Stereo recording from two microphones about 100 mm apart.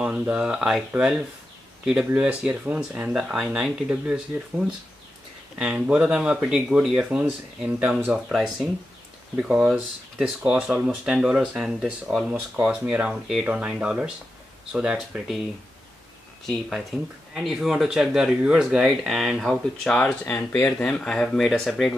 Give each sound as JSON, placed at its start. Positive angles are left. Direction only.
{"t": 0.3, "sound": "speech", "side_deg": -5}
{"t": 16.4, "sound": "speech", "side_deg": 0}